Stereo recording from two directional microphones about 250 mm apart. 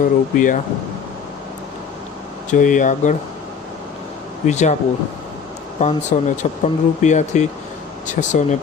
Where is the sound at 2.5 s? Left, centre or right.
Left.